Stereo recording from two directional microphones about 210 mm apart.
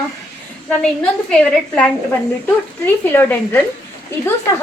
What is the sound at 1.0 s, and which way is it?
Speech, 5° left (ahead or behind).